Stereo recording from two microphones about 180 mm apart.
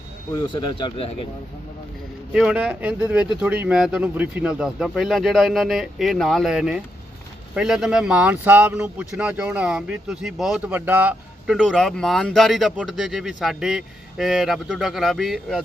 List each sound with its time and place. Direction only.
0.5 s speech: 25° left (ahead or behind)
2.3 s speech: 5° right (ahead or behind)